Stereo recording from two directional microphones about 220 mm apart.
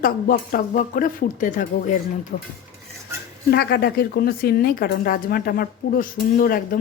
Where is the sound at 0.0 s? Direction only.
40° left (ahead or behind).